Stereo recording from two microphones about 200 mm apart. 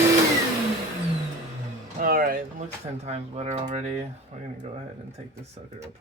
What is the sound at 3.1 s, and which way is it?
Speech, 35° right (ahead or behind).